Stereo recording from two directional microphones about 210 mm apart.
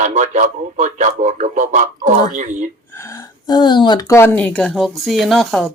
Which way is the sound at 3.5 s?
20° left (ahead or behind).